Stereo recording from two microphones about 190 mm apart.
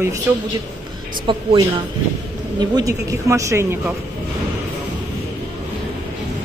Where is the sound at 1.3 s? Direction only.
25° right (ahead or behind).